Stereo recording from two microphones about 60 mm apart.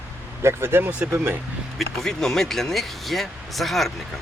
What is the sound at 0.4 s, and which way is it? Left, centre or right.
Speech, right.